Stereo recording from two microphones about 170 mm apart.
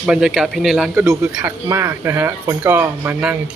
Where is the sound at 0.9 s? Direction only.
15° right (ahead or behind).